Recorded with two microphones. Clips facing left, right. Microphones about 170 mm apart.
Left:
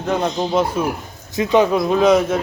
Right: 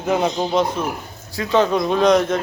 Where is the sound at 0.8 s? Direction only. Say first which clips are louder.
Left 4 dB; 5° left (ahead or behind).